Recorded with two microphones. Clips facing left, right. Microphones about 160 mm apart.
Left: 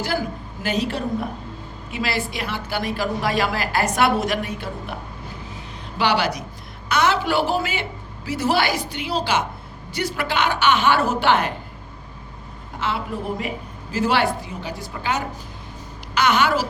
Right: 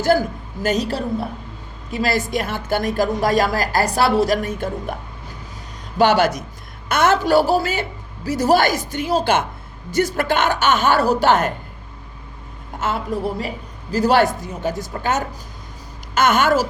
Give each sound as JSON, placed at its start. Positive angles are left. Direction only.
{"t": 0.0, "sound": "a man's voice", "side_deg": -45}
{"t": 4.4, "sound": "a man's voice", "side_deg": -45}
{"t": 6.0, "sound": "a man's voice", "side_deg": -45}
{"t": 12.8, "sound": "a woman's voice", "side_deg": -40}